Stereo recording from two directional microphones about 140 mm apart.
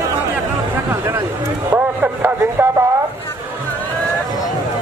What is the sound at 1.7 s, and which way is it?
A man's voice, 15° right (ahead or behind).